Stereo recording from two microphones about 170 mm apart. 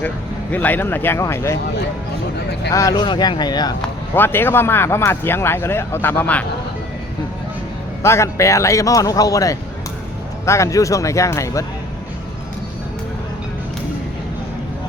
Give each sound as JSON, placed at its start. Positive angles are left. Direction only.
{"t": 0.5, "sound": "speech", "side_deg": 10}
{"t": 2.7, "sound": "a man's voice", "side_deg": 20}
{"t": 3.8, "sound": "speech", "side_deg": 10}
{"t": 8.0, "sound": "a man's voice", "side_deg": 15}